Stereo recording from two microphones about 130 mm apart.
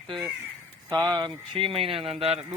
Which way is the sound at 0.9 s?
30° right (ahead or behind).